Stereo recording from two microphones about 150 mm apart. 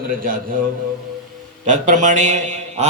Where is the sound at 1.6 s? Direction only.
55° right (ahead or behind).